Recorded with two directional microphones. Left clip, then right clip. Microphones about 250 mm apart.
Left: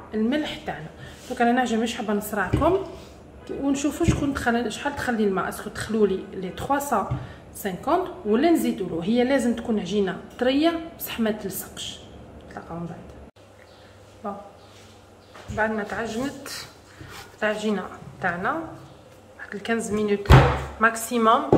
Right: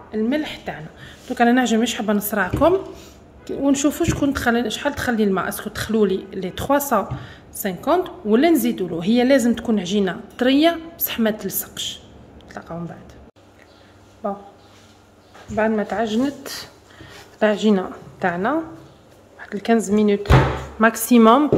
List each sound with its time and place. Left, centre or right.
0.1 s a woman's voice: right
1.0 s a woman's voice: right
14.2 s a woman's voice: right
15.5 s a woman's voice: right